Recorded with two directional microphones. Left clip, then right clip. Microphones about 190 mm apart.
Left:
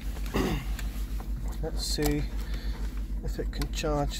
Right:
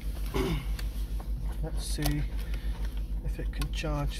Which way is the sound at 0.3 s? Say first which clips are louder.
Left 2 dB; 45° left (ahead or behind).